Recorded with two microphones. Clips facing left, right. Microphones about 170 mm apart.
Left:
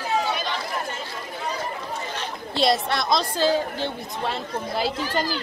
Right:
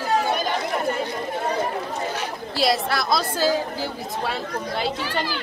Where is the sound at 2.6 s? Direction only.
5° right (ahead or behind).